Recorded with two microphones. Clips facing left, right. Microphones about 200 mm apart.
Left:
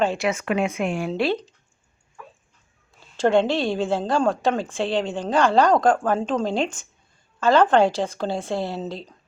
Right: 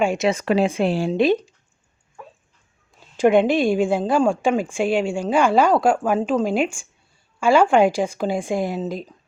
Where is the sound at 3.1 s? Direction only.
15° right (ahead or behind).